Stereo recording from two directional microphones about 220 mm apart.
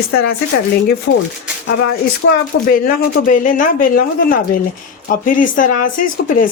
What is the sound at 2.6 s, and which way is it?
Speech, 40° left (ahead or behind).